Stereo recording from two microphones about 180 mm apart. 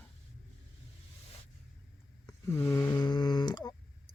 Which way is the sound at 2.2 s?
15° left (ahead or behind).